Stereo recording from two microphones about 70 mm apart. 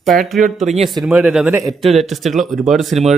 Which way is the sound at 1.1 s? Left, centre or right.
Centre.